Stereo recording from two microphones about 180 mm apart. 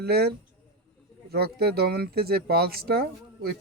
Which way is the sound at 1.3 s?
60° right (ahead or behind).